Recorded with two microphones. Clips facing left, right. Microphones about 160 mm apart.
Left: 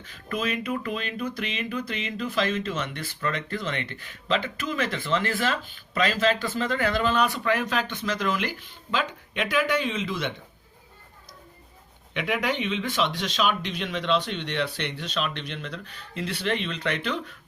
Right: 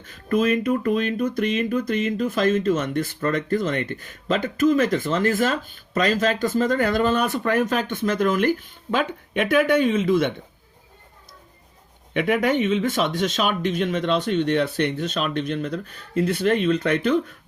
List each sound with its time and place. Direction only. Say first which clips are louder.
0.0 s speech: right 9 dB; 45° right (ahead or behind)
12.1 s speech: right 7 dB; 50° right (ahead or behind)